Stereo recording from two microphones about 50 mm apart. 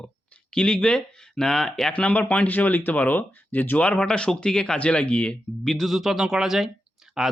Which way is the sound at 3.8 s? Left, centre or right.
Left.